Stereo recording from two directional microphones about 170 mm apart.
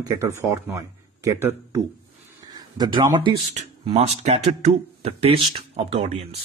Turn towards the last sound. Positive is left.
turn(degrees=-40)  # may be behind; listen again after turning